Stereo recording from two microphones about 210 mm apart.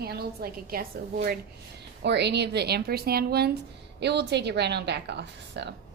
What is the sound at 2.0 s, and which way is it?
A woman's voice, 55° right (ahead or behind).